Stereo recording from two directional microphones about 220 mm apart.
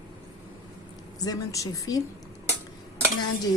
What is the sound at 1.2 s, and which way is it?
Speech, 15° left (ahead or behind).